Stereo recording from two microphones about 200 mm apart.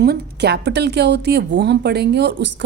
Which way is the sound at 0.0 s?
55° right (ahead or behind).